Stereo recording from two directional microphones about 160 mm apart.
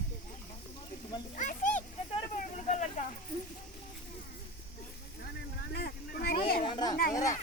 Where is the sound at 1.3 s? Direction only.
50° left (ahead or behind).